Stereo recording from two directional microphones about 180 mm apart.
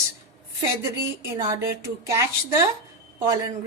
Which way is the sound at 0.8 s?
15° right (ahead or behind).